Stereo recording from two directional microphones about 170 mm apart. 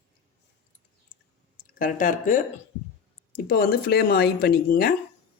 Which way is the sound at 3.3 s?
60° left (ahead or behind).